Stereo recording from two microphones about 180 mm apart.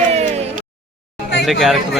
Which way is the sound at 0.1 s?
35° right (ahead or behind).